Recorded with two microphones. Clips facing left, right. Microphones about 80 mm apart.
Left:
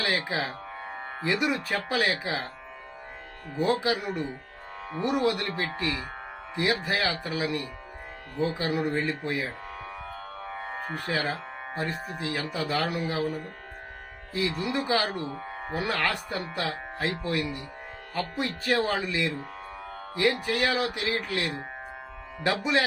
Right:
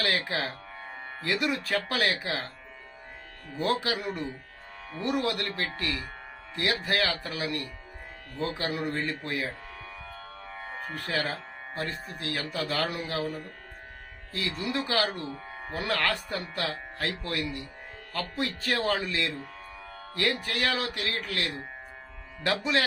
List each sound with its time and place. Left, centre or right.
0.0 s speech: centre
0.8 s music: left
1.2 s speech: centre
3.5 s speech: centre
10.1 s music: left
11.1 s speech: centre
14.6 s speech: centre
15.3 s music: left
15.7 s speech: centre